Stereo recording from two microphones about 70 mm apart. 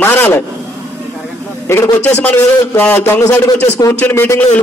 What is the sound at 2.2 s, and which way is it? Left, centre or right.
A man's voice, left.